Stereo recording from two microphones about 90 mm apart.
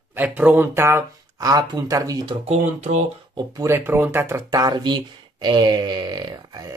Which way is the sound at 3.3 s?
50° right (ahead or behind).